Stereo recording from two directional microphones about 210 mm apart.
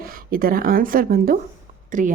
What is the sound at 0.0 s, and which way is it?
A woman's voice, 45° right (ahead or behind).